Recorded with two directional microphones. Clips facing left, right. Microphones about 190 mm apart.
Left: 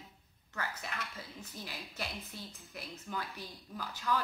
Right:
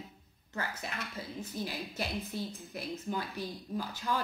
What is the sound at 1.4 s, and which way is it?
Speech, 30° right (ahead or behind).